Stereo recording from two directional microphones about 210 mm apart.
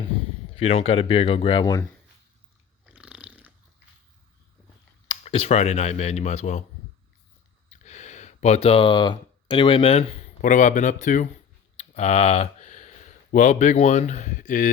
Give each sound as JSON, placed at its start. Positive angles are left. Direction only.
{"t": 0.5, "sound": "speech", "side_deg": 25}
{"t": 2.8, "sound": "biting", "side_deg": -5}
{"t": 5.2, "sound": "speech", "side_deg": 30}
{"t": 7.7, "sound": "a sound", "side_deg": 35}
{"t": 10.4, "sound": "speech", "side_deg": 35}